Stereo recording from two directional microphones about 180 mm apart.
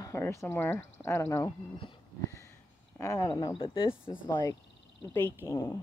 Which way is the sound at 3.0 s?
20° left (ahead or behind).